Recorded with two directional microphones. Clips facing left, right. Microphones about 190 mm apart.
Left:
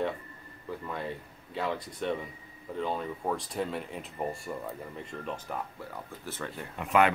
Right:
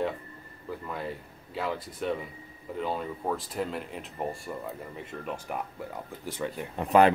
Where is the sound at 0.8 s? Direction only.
Centre (ahead or behind).